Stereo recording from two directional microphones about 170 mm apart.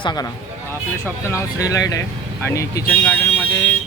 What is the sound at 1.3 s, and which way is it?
Speech, 20° left (ahead or behind).